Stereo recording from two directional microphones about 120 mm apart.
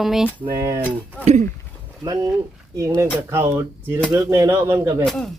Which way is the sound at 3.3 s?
20° right (ahead or behind).